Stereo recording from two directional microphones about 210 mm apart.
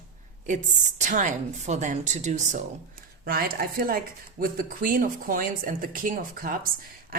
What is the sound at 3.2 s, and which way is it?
Speech, 45° right (ahead or behind).